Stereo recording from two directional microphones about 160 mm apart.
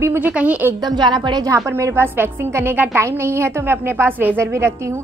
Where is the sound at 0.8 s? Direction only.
25° right (ahead or behind).